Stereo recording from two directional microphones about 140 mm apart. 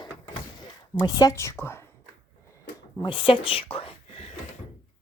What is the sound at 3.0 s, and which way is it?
Speech, 35° left (ahead or behind).